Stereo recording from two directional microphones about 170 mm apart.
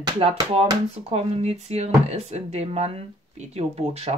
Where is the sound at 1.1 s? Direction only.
35° right (ahead or behind).